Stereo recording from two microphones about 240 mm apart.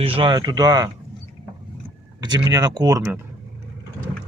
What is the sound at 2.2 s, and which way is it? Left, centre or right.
Speech, centre.